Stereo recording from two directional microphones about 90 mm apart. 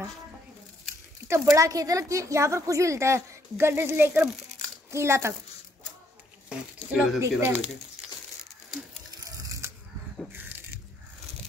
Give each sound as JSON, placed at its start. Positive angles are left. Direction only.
{"t": 1.2, "sound": "a woman's voice", "side_deg": -30}
{"t": 6.5, "sound": "speech", "side_deg": -15}
{"t": 7.2, "sound": "speech", "side_deg": -25}
{"t": 9.1, "sound": "a sound", "side_deg": -40}
{"t": 10.3, "sound": "biting", "side_deg": -20}